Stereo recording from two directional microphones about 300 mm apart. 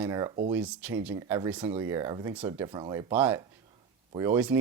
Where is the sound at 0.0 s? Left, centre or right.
Centre.